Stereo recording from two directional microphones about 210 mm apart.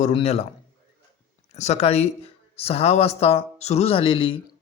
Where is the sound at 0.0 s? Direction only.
30° left (ahead or behind).